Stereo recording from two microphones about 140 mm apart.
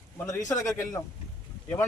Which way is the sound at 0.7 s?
20° left (ahead or behind).